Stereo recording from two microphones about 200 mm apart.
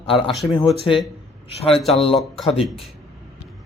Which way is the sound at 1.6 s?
30° left (ahead or behind).